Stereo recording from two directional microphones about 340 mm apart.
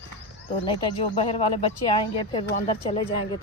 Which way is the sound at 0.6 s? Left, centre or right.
Centre.